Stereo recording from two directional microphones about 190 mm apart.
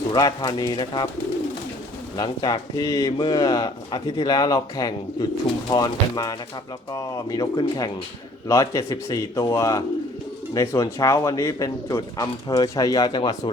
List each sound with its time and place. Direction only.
0.1 s speech: 20° left (ahead or behind)
2.1 s speech: 25° left (ahead or behind)